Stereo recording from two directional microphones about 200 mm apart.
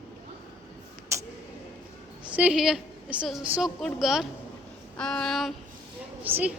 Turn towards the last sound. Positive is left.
turn(degrees=-10)  # may be behind; listen again after turning